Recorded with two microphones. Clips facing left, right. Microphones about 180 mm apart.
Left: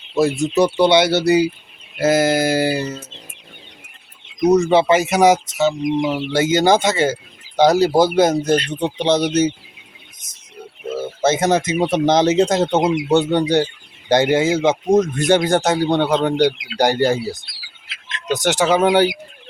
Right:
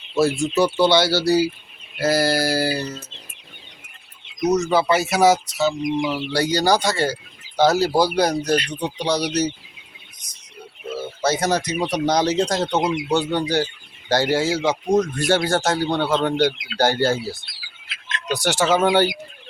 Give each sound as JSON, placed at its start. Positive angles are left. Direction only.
{"t": 0.1, "sound": "speech", "side_deg": 20}
{"t": 4.7, "sound": "speech", "side_deg": 20}
{"t": 11.2, "sound": "speech", "side_deg": 25}